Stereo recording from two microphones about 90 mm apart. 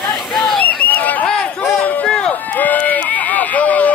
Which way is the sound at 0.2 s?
Centre (ahead or behind).